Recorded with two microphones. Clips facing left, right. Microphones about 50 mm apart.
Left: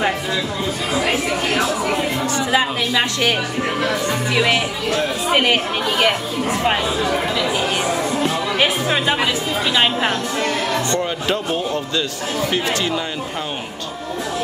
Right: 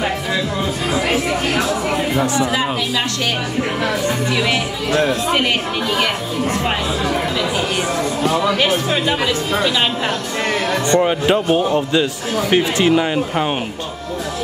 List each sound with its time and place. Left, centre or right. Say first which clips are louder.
0.9 s a sound: right 1 dB; centre
2.1 s speech: right 4 dB; centre
4.3 s speech: left 1 dB; centre
8.5 s speech: right 1 dB; centre
10.7 s a man's voice: right 5 dB; right